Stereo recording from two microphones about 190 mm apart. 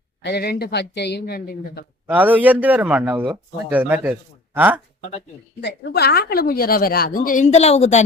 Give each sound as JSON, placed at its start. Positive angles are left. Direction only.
{"t": 0.2, "sound": "speech", "side_deg": 60}
{"t": 2.0, "sound": "a man's voice", "side_deg": -10}
{"t": 4.9, "sound": "speech", "side_deg": 35}
{"t": 5.5, "sound": "a woman's voice", "side_deg": 60}